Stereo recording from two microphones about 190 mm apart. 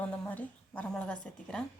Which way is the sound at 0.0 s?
10° left (ahead or behind).